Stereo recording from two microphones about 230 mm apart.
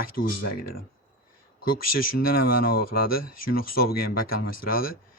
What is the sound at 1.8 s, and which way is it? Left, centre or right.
Speech, left.